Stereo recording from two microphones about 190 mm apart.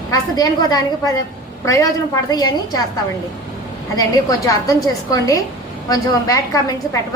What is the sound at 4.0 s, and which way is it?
A woman's voice, 20° left (ahead or behind).